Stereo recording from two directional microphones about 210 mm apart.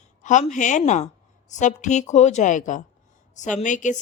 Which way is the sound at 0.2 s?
35° left (ahead or behind).